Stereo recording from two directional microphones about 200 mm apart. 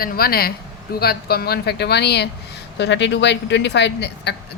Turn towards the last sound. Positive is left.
turn(degrees=60)  # may be behind; listen again after turning